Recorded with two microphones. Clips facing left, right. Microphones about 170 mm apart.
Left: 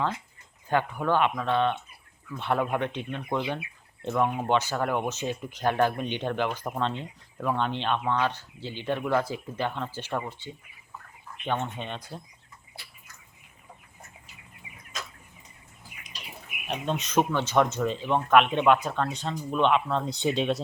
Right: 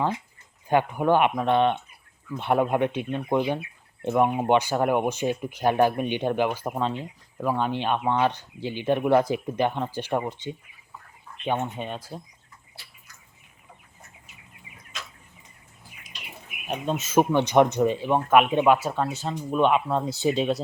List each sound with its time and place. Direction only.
0.7 s speech: 15° right (ahead or behind)
14.9 s a sound: 40° left (ahead or behind)
16.6 s speech: 5° right (ahead or behind)
17.3 s speech: 15° right (ahead or behind); by 20.6 s centre (ahead or behind)